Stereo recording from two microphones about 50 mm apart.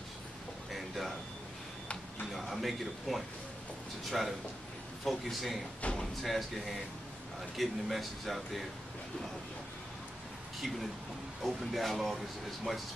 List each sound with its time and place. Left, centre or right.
0.7 s a sound: centre
2.3 s speech: centre
5.8 s drawer open or close: left
6.2 s speech: centre
11.4 s speech: centre